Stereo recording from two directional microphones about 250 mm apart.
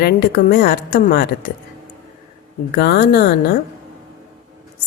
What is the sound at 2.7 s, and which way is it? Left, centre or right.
Speech, left.